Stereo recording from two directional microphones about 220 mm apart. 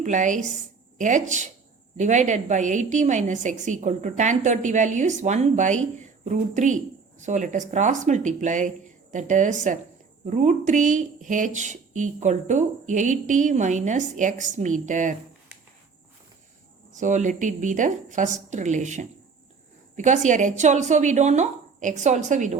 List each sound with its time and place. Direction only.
0.0 s a woman's voice: 35° right (ahead or behind)
16.9 s a woman's voice: 35° right (ahead or behind)